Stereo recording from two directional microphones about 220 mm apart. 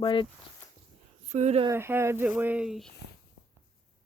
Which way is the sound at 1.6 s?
10° right (ahead or behind).